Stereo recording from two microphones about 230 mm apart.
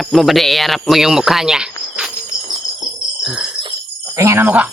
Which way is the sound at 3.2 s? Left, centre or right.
Centre.